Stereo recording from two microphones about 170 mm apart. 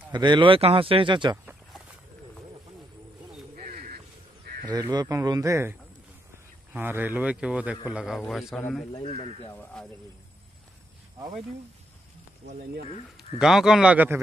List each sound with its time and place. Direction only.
0.1 s speech: 25° right (ahead or behind)
1.4 s a sound: 10° right (ahead or behind)
3.5 s crow: 55° right (ahead or behind)
4.7 s a man's voice: 20° right (ahead or behind); by 8.6 s centre (ahead or behind)
8.9 s speech: 35° left (ahead or behind)
13.4 s speech: 5° right (ahead or behind)